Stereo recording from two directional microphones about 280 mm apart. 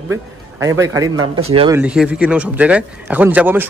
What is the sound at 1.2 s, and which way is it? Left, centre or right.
Speech, right.